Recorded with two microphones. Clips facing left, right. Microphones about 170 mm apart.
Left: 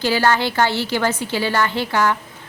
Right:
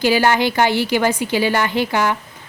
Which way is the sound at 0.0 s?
15° right (ahead or behind).